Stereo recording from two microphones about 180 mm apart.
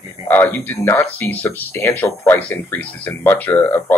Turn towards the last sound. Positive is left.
turn(degrees=10)  # may be behind; listen again after turning